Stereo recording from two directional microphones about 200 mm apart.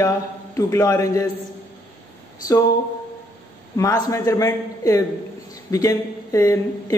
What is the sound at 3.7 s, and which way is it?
A man's voice, 15° left (ahead or behind).